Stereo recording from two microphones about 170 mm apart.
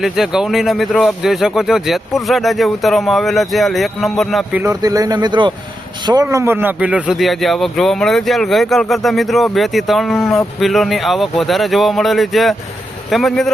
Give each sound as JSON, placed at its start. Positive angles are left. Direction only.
{"t": 0.0, "sound": "speech", "side_deg": 0}
{"t": 4.6, "sound": "a man's voice", "side_deg": -20}
{"t": 6.2, "sound": "speech", "side_deg": -15}